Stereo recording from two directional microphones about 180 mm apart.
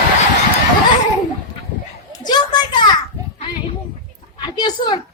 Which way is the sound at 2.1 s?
25° left (ahead or behind).